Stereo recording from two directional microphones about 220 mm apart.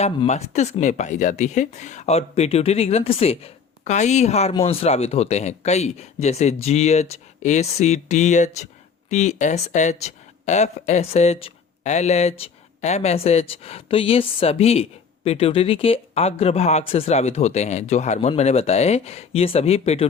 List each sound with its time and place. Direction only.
0.0 s speech: 30° left (ahead or behind)